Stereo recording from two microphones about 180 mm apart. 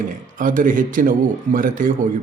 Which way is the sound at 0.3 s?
50° right (ahead or behind).